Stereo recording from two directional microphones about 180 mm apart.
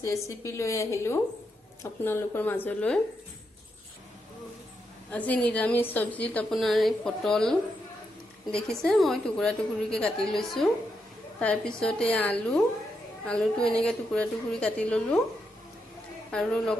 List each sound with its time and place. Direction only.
0.0 s a woman's voice: 15° left (ahead or behind)
5.1 s a woman's voice: 10° left (ahead or behind)
8.5 s a woman's voice: 5° left (ahead or behind)
16.3 s a woman's voice: 5° left (ahead or behind)